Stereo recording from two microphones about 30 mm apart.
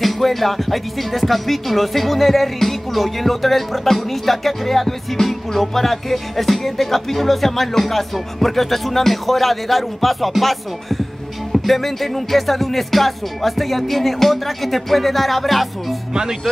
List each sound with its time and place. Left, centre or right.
0.0 s music: centre
16.1 s speech: right